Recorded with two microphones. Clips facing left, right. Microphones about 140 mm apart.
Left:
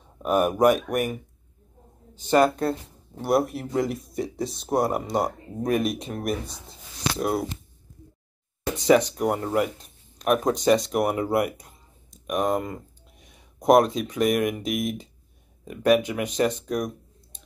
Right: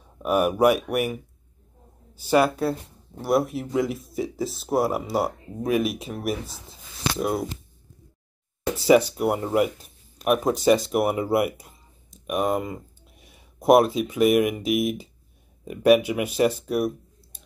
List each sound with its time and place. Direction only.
0.2 s speech: 10° right (ahead or behind)
2.1 s speech: 10° right (ahead or behind)
8.7 s speech: 10° right (ahead or behind)